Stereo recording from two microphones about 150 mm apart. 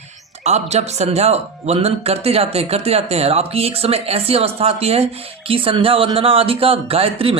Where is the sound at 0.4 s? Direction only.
45° right (ahead or behind).